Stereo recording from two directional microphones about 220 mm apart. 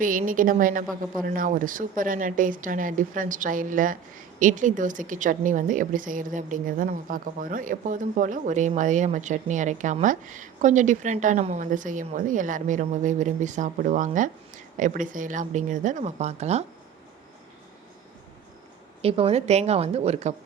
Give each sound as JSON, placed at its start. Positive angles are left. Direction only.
{"t": 0.0, "sound": "speech", "side_deg": -40}
{"t": 19.0, "sound": "a woman's voice", "side_deg": -25}